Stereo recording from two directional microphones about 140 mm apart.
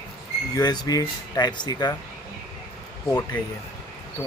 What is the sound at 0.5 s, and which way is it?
Speech, 30° left (ahead or behind).